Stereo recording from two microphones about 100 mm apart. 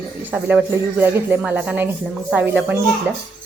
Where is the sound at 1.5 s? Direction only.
15° right (ahead or behind).